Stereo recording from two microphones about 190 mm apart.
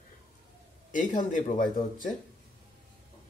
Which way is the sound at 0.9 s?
45° left (ahead or behind).